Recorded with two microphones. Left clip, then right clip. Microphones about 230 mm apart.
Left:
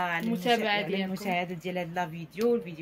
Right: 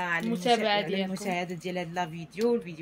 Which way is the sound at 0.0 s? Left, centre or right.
Centre.